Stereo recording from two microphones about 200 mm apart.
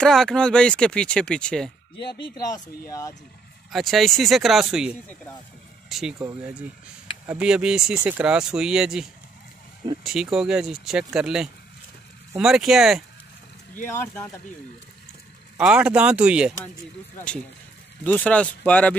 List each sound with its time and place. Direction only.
0.0 s speech: centre (ahead or behind)
2.4 s speech: 15° left (ahead or behind)
3.7 s speech: centre (ahead or behind)
7.2 s speech: 5° right (ahead or behind)
10.0 s speech: 5° right (ahead or behind)
13.8 s speech: 10° left (ahead or behind)
15.5 s speech: 5° right (ahead or behind)
18.0 s speech: 5° left (ahead or behind)